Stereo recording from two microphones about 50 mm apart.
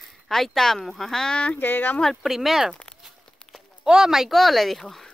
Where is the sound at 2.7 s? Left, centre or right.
Left.